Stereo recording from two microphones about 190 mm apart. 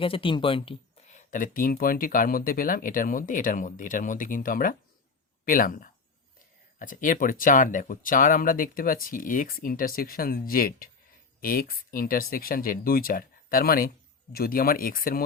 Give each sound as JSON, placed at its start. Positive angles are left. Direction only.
{"t": 0.0, "sound": "speech", "side_deg": 30}